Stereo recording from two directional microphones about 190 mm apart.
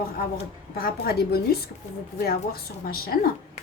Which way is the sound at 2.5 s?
55° left (ahead or behind).